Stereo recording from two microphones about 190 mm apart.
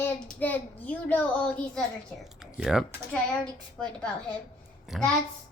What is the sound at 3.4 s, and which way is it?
A woman's voice, 5° left (ahead or behind).